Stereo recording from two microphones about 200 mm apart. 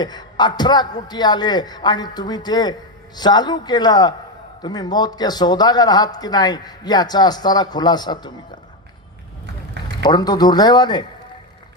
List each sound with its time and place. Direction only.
0.0 s speech: 20° left (ahead or behind)
10.0 s speech: 20° left (ahead or behind)